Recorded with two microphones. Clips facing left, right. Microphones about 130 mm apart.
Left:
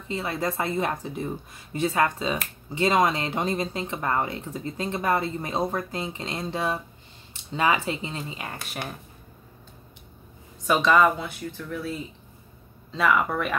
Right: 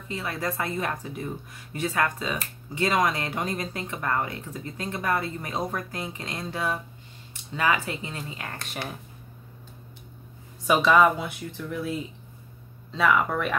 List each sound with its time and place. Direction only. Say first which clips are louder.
0.1 s speech: left 3 dB; 25° left (ahead or behind)
10.7 s speech: even; 5° right (ahead or behind)
12.9 s speech: even; centre (ahead or behind)